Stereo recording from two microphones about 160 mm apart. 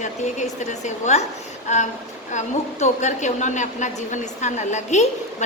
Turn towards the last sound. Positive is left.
turn(degrees=45)  # may be behind; listen again after turning